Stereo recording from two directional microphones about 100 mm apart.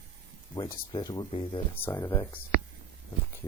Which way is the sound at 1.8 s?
20° left (ahead or behind).